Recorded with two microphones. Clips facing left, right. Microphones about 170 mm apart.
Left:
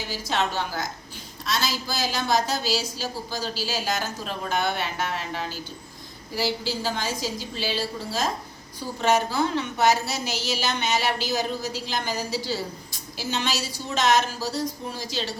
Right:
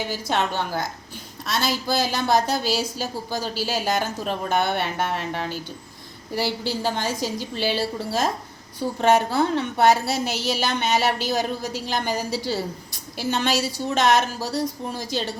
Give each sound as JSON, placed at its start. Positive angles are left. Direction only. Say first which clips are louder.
{"t": 0.1, "sound": "a woman's voice", "louder": "left 2 dB", "side_deg": -55}